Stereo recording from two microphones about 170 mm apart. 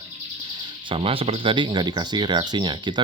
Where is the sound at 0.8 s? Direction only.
35° right (ahead or behind).